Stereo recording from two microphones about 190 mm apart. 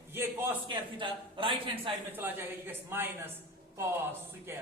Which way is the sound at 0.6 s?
25° right (ahead or behind).